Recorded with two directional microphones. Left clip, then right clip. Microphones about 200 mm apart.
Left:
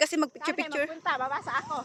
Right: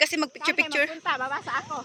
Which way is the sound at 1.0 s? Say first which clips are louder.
Right 2 dB; 40° right (ahead or behind).